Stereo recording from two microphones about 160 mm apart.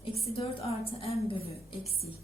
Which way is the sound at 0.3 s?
40° left (ahead or behind).